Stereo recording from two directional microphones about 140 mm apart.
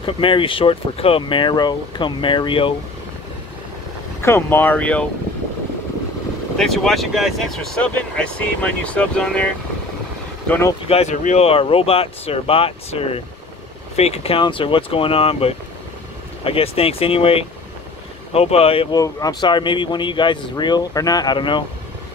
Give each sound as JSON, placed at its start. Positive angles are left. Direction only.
{"t": 0.0, "sound": "speech", "side_deg": 40}
{"t": 4.2, "sound": "speech", "side_deg": 15}
{"t": 6.5, "sound": "speech", "side_deg": 5}
{"t": 10.9, "sound": "speech", "side_deg": 50}
{"t": 18.9, "sound": "speech", "side_deg": 25}
{"t": 19.4, "sound": "speech", "side_deg": 35}